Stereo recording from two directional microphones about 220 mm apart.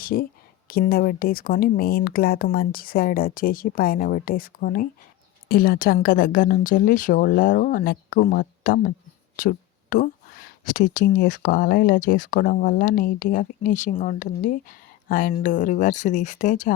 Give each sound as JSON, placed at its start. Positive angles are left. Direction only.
{"t": 0.0, "sound": "speech", "side_deg": 40}